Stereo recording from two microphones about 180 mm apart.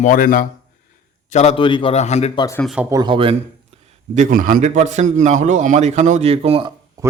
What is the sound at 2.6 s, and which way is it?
Speech, 5° right (ahead or behind).